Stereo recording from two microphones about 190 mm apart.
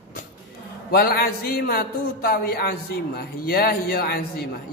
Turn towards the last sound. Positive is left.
turn(degrees=55)  # may be behind; listen again after turning